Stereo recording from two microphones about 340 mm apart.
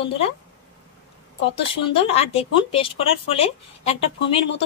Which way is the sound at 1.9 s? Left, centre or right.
Centre.